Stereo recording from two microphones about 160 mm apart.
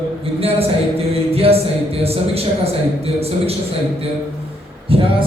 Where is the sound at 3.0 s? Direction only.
40° right (ahead or behind).